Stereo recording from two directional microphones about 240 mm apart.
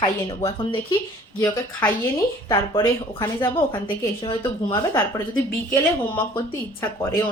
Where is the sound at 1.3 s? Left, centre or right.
Centre.